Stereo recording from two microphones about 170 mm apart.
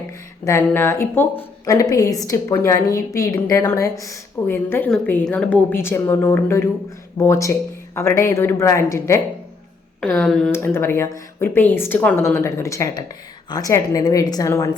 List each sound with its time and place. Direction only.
0.4 s a woman's voice: 15° left (ahead or behind)